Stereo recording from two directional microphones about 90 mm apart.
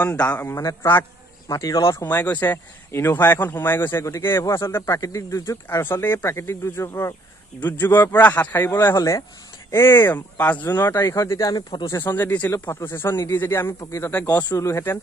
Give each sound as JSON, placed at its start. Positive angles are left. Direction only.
{"t": 0.0, "sound": "a man's voice", "side_deg": 15}
{"t": 0.5, "sound": "speech", "side_deg": 35}
{"t": 2.0, "sound": "speech", "side_deg": 20}
{"t": 7.6, "sound": "speech", "side_deg": 20}
{"t": 11.9, "sound": "speech", "side_deg": 25}